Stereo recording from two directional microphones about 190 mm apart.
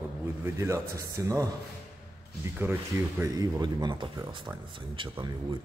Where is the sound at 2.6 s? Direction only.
15° right (ahead or behind).